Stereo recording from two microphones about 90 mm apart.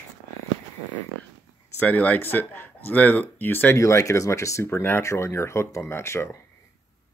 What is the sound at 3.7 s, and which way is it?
Speech, 35° left (ahead or behind).